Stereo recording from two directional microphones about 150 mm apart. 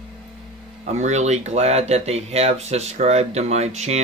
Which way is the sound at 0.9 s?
50° right (ahead or behind).